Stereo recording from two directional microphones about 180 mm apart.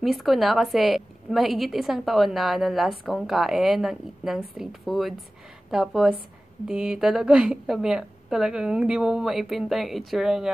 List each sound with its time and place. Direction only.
0.0 s a woman's voice: centre (ahead or behind)